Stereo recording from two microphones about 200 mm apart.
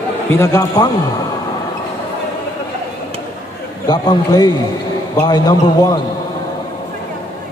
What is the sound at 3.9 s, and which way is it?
A man's voice, 20° left (ahead or behind).